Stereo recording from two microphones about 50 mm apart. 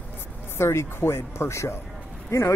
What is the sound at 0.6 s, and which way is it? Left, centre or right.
A man's voice, left.